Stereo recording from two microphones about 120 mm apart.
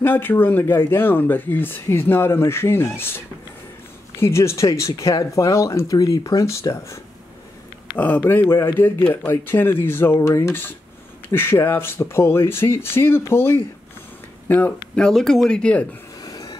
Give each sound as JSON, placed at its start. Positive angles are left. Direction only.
{"t": 0.0, "sound": "speech", "side_deg": 15}
{"t": 4.2, "sound": "speech", "side_deg": 20}
{"t": 8.0, "sound": "speech", "side_deg": 15}
{"t": 16.2, "sound": "train", "side_deg": 30}